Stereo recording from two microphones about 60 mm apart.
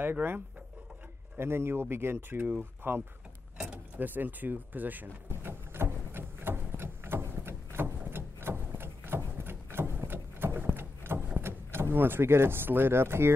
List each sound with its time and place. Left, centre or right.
0.0 s speech: right
1.4 s speech: right
5.3 s a sound: right
11.4 s speech: right